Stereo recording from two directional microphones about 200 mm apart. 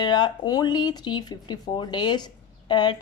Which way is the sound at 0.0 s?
20° left (ahead or behind).